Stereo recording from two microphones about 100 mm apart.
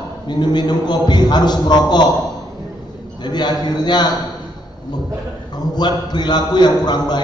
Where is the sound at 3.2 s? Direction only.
45° left (ahead or behind).